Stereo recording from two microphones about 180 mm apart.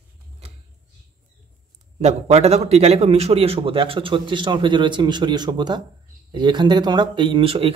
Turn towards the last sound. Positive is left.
turn(degrees=-30)  # may be behind; listen again after turning